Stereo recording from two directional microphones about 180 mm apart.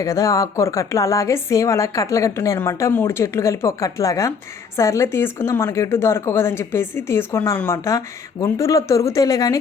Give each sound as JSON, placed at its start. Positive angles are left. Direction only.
{"t": 0.0, "sound": "speech", "side_deg": 15}